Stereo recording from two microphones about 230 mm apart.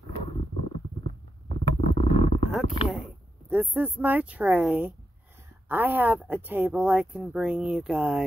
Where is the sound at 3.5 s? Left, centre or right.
Centre.